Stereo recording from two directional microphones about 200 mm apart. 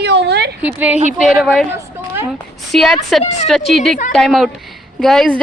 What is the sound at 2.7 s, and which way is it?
Speech, centre (ahead or behind).